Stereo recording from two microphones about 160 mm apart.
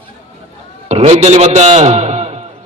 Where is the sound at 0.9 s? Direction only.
40° right (ahead or behind).